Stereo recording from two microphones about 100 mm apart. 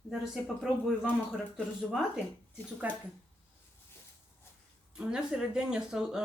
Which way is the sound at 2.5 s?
10° right (ahead or behind).